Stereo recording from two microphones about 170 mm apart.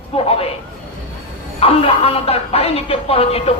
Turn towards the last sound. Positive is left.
turn(degrees=35)  # may be behind; listen again after turning